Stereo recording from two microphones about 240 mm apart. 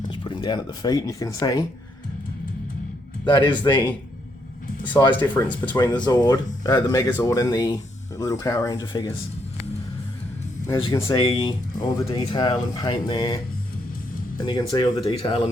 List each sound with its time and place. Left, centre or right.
0.1 s speech: centre
3.2 s speech: centre
10.7 s speech: centre